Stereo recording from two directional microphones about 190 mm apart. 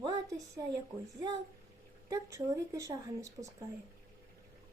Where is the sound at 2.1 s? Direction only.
15° right (ahead or behind).